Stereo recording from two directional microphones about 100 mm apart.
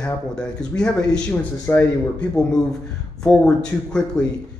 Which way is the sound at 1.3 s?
20° left (ahead or behind).